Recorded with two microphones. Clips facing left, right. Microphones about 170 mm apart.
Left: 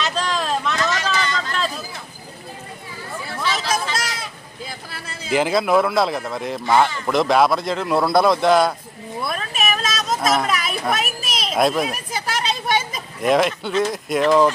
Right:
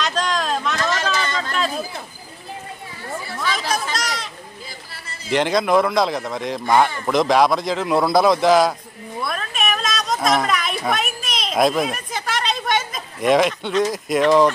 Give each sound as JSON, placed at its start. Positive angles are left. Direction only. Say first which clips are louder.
{"t": 0.0, "sound": "a sound", "louder": "right 1 dB", "side_deg": 5}
{"t": 3.5, "sound": "chatter", "louder": "even", "side_deg": -45}
{"t": 3.9, "sound": "a sound", "louder": "right 1 dB", "side_deg": 5}
{"t": 5.3, "sound": "speech", "louder": "even", "side_deg": 5}
{"t": 9.2, "sound": "children playing", "louder": "even", "side_deg": 5}
{"t": 13.2, "sound": "speech", "louder": "right 1 dB", "side_deg": 0}